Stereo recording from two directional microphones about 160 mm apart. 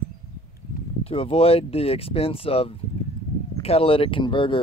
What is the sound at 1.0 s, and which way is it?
Speech, 35° left (ahead or behind).